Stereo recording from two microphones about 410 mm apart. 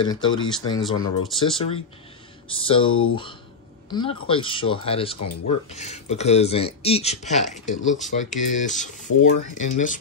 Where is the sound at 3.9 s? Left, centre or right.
Centre.